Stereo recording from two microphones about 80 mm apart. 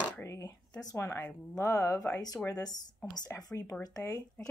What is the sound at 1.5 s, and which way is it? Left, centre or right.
A woman's voice, left.